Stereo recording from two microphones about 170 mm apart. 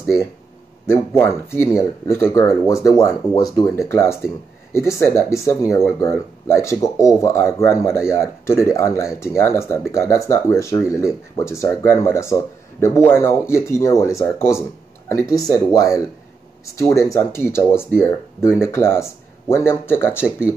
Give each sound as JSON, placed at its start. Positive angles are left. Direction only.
{"t": 0.8, "sound": "speech", "side_deg": 15}
{"t": 17.1, "sound": "speech", "side_deg": 15}